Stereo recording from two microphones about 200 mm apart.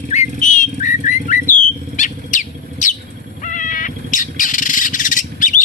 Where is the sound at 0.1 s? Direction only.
35° left (ahead or behind).